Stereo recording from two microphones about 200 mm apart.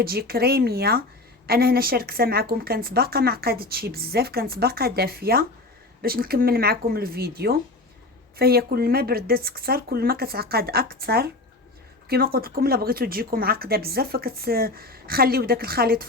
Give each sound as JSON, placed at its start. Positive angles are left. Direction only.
{"t": 0.0, "sound": "a woman's voice", "side_deg": -50}